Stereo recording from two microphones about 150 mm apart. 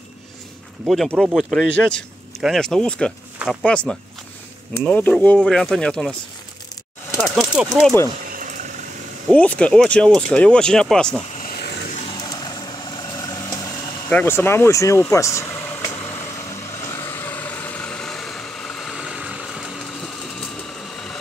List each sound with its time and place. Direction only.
0.8 s speech: centre (ahead or behind)
7.2 s speech: 5° right (ahead or behind)
8.3 s boiling: 60° right (ahead or behind)
9.3 s speech: 10° left (ahead or behind)
11.3 s vehicle: 80° left
12.0 s vehicle: 30° left (ahead or behind)
14.0 s speech: 15° left (ahead or behind)
15.9 s vehicle: 15° left (ahead or behind)